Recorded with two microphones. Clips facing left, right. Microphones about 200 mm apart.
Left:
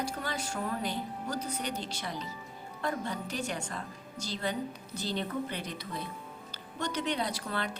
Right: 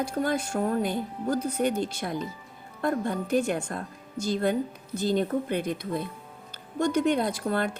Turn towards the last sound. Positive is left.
turn(degrees=-50)  # may be behind; listen again after turning